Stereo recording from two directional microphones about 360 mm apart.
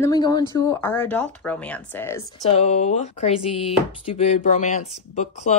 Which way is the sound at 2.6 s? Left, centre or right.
Centre.